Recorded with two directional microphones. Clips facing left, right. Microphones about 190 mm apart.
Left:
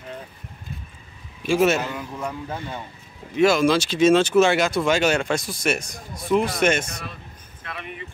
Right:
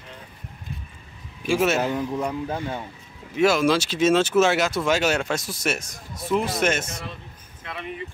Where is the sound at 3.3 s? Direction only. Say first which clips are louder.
Left 2 dB; 5° right (ahead or behind).